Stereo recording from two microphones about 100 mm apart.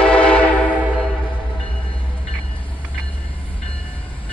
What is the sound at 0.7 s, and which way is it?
Train, 15° right (ahead or behind).